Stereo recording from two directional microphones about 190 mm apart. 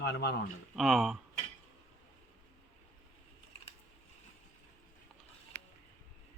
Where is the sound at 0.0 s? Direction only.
60° left (ahead or behind).